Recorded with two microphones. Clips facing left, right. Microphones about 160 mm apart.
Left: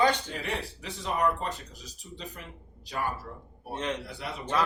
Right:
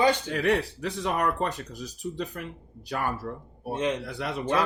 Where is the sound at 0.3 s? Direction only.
65° right (ahead or behind).